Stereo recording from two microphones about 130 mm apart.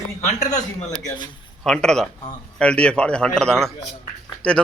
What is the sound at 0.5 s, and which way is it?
Speech, 30° left (ahead or behind).